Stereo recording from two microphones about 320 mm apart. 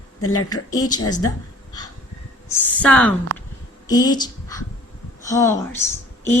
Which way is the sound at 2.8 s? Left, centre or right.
Centre.